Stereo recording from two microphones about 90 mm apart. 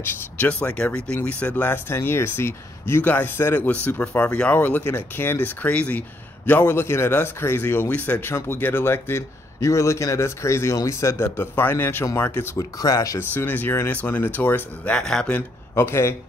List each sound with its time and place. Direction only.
0.0 s speech: 20° left (ahead or behind)
12.5 s speech: 40° left (ahead or behind)
13.2 s speech: 20° left (ahead or behind)
15.0 s speech: 5° left (ahead or behind)
15.7 s speech: 30° left (ahead or behind)